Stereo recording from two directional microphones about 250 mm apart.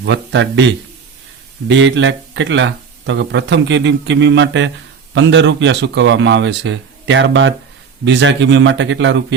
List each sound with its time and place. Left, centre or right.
0.0 s speech: right